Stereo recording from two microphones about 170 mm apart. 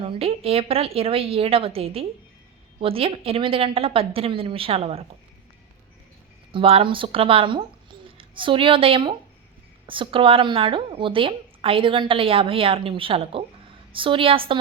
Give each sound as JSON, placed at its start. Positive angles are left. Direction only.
{"t": 0.0, "sound": "a woman's voice", "side_deg": -35}
{"t": 6.5, "sound": "a woman's voice", "side_deg": -35}